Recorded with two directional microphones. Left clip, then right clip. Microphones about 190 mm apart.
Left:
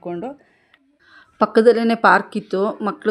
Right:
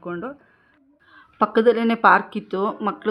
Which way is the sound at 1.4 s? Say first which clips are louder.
Left 4 dB; 30° left (ahead or behind).